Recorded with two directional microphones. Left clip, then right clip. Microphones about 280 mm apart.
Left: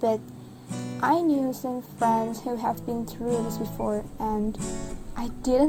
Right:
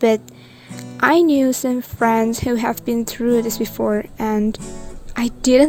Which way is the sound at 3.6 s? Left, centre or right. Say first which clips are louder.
Right 9 dB; right.